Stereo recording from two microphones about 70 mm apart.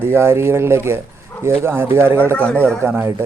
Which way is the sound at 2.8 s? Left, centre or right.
Right.